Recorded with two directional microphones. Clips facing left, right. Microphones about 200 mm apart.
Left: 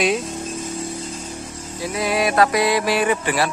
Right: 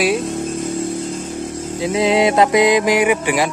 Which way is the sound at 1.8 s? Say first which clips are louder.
Right 6 dB; 25° right (ahead or behind).